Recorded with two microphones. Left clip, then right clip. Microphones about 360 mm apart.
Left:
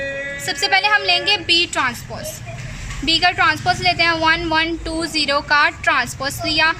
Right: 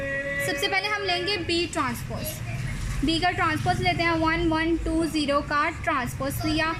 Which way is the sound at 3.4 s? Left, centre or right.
Left.